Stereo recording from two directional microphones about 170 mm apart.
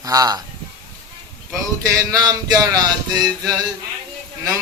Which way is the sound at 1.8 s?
20° right (ahead or behind).